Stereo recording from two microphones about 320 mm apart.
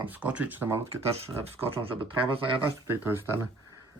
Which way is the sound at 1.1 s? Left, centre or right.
Centre.